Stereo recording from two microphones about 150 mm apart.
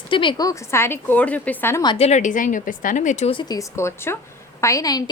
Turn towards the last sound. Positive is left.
turn(degrees=25)  # may be behind; listen again after turning